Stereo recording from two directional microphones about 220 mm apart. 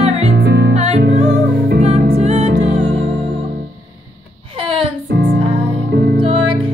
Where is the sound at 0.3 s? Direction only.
50° right (ahead or behind).